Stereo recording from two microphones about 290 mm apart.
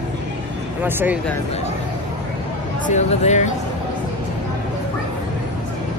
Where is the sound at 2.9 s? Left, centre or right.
Left.